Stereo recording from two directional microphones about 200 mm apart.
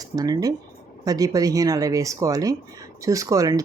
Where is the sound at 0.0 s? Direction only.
20° right (ahead or behind).